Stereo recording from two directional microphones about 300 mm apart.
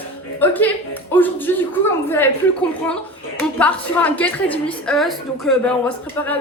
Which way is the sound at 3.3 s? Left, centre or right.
Centre.